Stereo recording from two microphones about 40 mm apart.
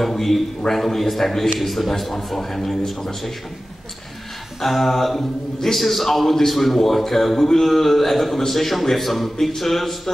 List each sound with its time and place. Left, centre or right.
0.0 s a man's voice: centre
4.6 s speech: centre